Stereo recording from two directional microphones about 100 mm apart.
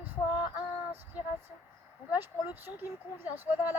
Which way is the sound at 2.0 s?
20° right (ahead or behind).